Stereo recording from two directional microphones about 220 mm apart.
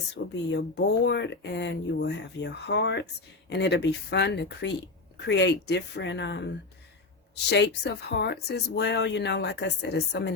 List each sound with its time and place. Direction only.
0.1 s speech: 50° left (ahead or behind)
7.5 s speech: 50° left (ahead or behind)